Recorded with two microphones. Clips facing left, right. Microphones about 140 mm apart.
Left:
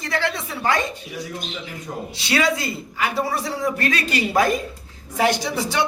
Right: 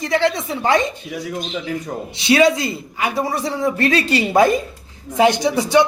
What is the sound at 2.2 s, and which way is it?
A man's voice, 20° right (ahead or behind).